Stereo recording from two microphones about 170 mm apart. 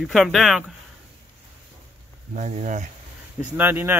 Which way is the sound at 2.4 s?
45° right (ahead or behind).